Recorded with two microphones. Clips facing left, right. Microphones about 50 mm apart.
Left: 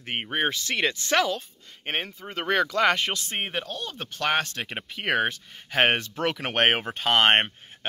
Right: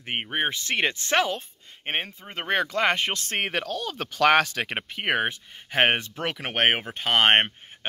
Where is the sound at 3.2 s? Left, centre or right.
Right.